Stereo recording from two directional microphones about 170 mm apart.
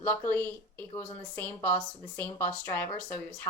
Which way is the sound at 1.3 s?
10° left (ahead or behind).